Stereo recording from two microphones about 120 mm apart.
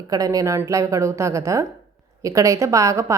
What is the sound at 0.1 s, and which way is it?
Speech, 30° right (ahead or behind).